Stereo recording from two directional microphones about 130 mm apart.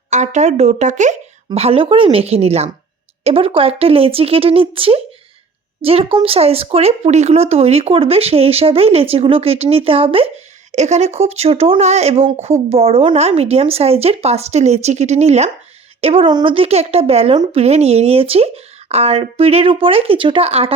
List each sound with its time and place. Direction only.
0.1 s speech: 65° right (ahead or behind)
1.5 s speech: 50° right (ahead or behind)